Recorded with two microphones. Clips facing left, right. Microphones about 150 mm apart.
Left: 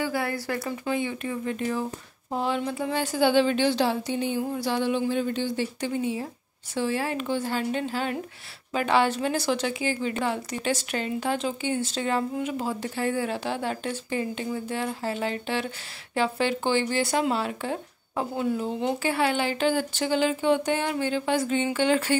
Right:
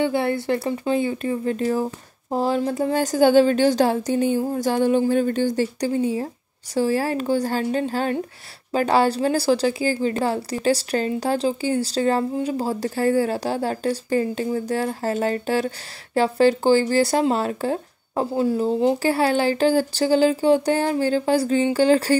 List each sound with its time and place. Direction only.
0.0 s a woman's voice: 25° right (ahead or behind)